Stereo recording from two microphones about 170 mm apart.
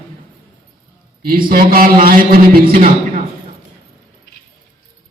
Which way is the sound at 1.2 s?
55° right (ahead or behind).